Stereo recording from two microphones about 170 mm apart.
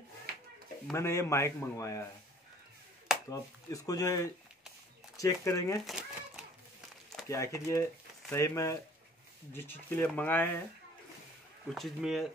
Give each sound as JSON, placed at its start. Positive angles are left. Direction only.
{"t": 0.3, "sound": "a sound", "side_deg": -65}
{"t": 0.9, "sound": "a man's voice", "side_deg": 15}
{"t": 3.3, "sound": "speech", "side_deg": 20}
{"t": 5.9, "sound": "a sound", "side_deg": -5}
{"t": 7.2, "sound": "a man's voice", "side_deg": 20}
{"t": 11.7, "sound": "speech", "side_deg": 0}